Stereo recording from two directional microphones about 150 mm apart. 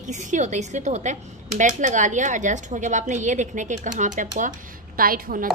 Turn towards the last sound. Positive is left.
turn(degrees=-75)  # may be behind; listen again after turning